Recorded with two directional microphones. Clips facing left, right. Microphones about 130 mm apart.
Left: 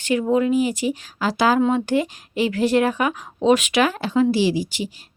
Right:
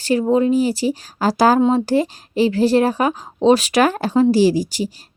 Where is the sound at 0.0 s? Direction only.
35° right (ahead or behind).